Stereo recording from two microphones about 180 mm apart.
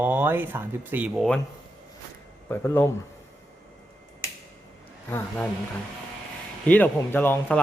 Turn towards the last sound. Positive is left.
turn(degrees=10)  # may be behind; listen again after turning